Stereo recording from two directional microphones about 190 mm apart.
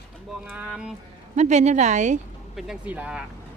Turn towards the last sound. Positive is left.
turn(degrees=-5)  # may be behind; listen again after turning